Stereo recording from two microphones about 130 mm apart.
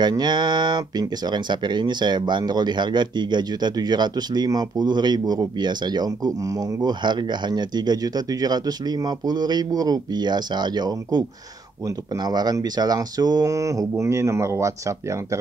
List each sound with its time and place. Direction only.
0.0 s speech: 35° right (ahead or behind)